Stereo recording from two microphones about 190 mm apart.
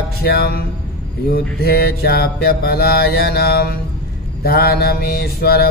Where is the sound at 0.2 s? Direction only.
55° left (ahead or behind).